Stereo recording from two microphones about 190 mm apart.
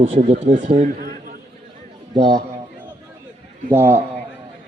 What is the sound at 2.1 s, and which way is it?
Speech, 25° right (ahead or behind).